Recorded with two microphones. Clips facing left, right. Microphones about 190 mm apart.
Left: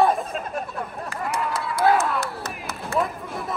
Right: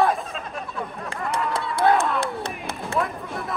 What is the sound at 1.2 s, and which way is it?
Run, 5° left (ahead or behind).